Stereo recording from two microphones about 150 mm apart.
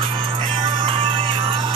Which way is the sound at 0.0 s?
35° right (ahead or behind).